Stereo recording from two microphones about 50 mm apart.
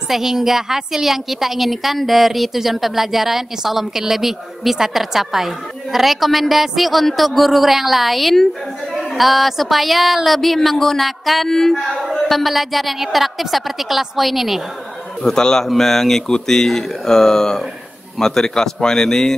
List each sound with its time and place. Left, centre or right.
0.1 s a woman's voice: centre
15.2 s speech: centre